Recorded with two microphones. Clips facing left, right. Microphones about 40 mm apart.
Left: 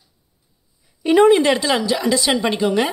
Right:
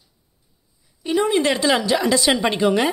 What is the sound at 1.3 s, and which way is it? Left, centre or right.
Speech, centre.